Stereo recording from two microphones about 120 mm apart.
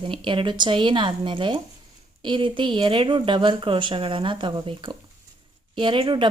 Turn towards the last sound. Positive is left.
turn(degrees=-40)  # may be behind; listen again after turning